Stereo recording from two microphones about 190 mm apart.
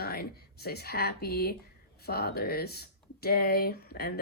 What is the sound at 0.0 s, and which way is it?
Speech, 55° left (ahead or behind).